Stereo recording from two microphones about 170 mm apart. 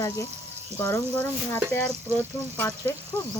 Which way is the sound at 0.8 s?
15° left (ahead or behind).